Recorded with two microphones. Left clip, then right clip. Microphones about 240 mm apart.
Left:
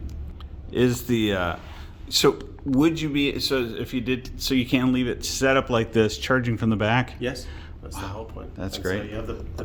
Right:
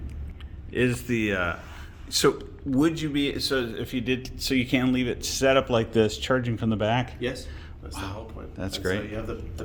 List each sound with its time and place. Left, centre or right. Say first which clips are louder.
0.7 s speech: left 3 dB; left
7.9 s speech: left 2 dB; centre